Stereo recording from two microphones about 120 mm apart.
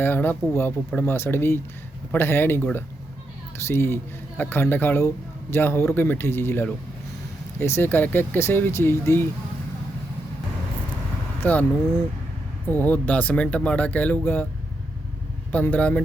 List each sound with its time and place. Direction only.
0.0 s speech: 15° left (ahead or behind)
3.7 s speech: 20° left (ahead or behind)
11.4 s speech: 15° left (ahead or behind)
15.5 s speech: 15° left (ahead or behind)